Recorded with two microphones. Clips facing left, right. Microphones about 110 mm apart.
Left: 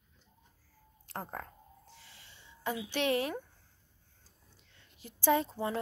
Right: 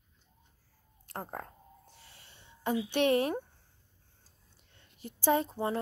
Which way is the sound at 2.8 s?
50° right (ahead or behind).